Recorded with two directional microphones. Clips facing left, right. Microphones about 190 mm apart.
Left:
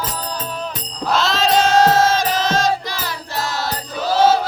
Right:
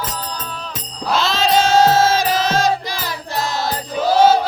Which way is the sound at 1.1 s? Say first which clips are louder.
Even; centre (ahead or behind).